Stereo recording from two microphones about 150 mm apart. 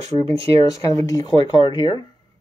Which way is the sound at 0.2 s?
40° right (ahead or behind).